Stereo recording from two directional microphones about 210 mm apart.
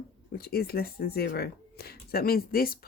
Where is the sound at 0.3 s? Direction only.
45° left (ahead or behind).